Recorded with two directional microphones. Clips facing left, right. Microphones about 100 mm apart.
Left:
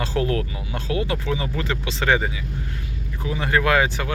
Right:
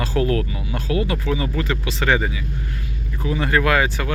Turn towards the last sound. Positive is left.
turn(degrees=20)  # may be behind; listen again after turning